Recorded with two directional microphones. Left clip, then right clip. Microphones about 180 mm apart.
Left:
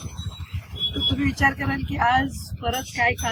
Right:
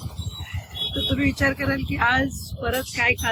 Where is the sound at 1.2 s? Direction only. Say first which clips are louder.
Even; centre (ahead or behind).